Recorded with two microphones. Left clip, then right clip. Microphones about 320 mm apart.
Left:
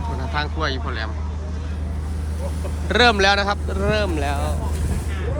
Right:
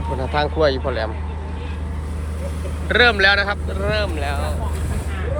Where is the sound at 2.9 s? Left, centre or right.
Centre.